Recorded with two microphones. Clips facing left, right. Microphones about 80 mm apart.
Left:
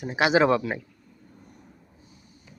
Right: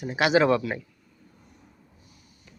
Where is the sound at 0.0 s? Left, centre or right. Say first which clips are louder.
Even; left.